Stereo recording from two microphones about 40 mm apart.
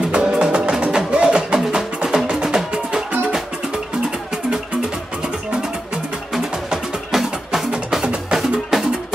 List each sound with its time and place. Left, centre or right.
0.1 s music: right
6.3 s music: centre